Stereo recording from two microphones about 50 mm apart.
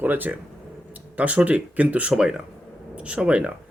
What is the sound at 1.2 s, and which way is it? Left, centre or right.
Speech, right.